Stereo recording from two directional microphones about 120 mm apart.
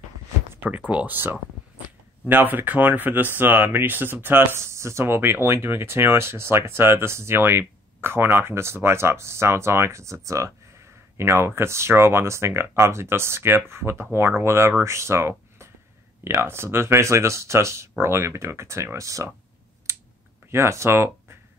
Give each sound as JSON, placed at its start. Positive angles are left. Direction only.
{"t": 0.5, "sound": "speech", "side_deg": -15}
{"t": 19.9, "sound": "clicking", "side_deg": -25}
{"t": 20.5, "sound": "speech", "side_deg": -20}